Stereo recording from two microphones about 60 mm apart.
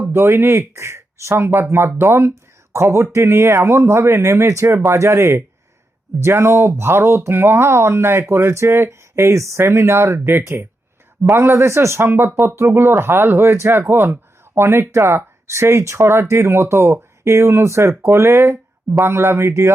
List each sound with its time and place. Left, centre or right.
0.0 s speech: right
9.3 s speech: right
12.0 s speech: right